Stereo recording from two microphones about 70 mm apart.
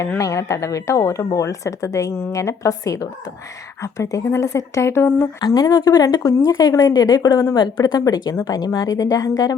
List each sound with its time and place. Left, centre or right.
0.2 s speech: left
5.5 s a woman's voice: left
7.5 s a woman's voice: left